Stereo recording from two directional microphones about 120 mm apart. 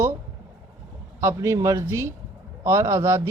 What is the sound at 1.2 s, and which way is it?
A man's voice, 25° right (ahead or behind).